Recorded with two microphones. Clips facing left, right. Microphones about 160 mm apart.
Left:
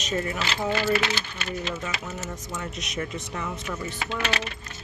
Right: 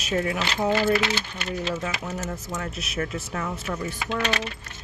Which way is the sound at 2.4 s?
5° right (ahead or behind).